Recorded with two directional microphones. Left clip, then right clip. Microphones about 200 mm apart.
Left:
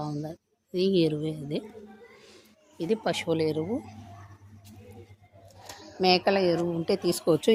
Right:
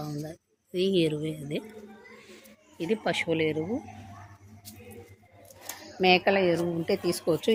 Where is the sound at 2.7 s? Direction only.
10° left (ahead or behind).